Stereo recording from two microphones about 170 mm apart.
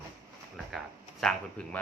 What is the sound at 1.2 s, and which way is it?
Speech, 5° left (ahead or behind).